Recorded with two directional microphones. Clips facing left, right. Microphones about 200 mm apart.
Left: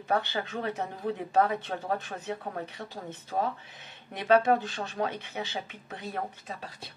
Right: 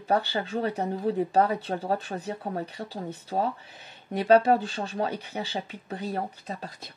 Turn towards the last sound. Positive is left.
turn(degrees=-35)  # may be behind; listen again after turning